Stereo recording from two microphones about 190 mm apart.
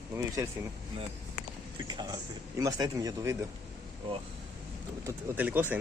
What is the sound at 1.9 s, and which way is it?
Speech, 20° right (ahead or behind).